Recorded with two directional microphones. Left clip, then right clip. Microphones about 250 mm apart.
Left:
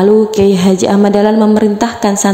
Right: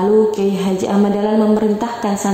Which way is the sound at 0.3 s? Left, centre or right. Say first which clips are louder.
Left 7 dB; left.